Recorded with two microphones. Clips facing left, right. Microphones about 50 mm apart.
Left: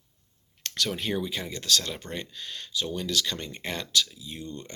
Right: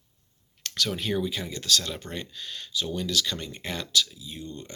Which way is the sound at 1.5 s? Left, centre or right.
Left.